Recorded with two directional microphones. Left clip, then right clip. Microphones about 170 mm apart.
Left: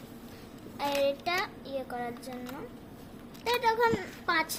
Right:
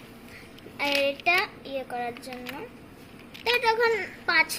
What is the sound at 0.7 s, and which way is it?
Child singing, 15° right (ahead or behind).